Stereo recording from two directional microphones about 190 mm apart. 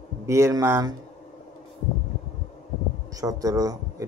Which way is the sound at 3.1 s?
20° right (ahead or behind).